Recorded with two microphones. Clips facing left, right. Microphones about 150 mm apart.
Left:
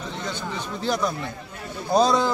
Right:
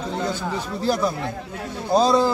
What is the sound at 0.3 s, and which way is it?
Speech, 35° right (ahead or behind).